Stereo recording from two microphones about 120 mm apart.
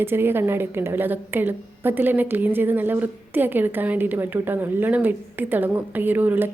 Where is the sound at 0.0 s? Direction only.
20° right (ahead or behind).